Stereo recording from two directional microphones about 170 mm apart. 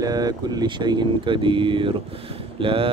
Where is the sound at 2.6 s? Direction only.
30° right (ahead or behind).